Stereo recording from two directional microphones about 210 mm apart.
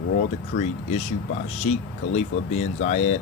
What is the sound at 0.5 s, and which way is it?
Speech, 30° left (ahead or behind).